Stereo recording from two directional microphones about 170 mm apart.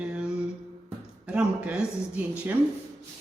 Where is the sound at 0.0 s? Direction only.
5° right (ahead or behind).